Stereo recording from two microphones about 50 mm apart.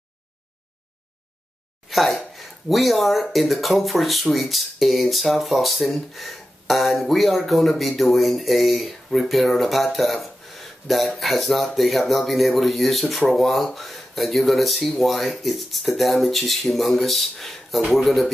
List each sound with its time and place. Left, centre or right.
1.9 s speech: centre